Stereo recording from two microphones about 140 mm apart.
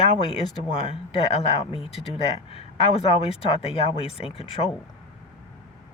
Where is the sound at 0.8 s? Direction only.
45° left (ahead or behind).